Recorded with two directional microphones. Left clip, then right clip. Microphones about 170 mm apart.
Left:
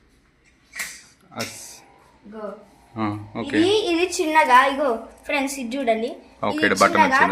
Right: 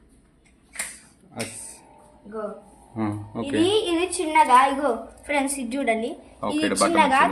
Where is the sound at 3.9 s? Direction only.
50° left (ahead or behind).